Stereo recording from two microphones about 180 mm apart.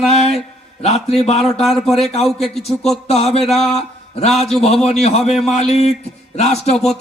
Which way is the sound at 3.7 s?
35° left (ahead or behind).